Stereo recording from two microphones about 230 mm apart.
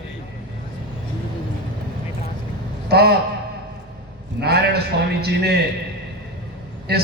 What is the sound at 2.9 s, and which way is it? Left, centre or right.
Speech, right.